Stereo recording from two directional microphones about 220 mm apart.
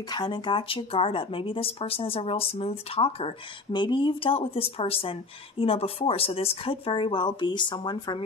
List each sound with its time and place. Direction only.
0.1 s speech: 20° left (ahead or behind)